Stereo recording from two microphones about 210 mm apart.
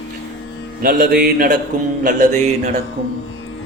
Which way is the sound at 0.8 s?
45° right (ahead or behind).